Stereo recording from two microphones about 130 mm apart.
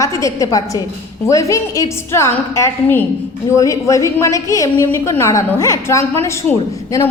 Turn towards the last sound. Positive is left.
turn(degrees=20)  # may be behind; listen again after turning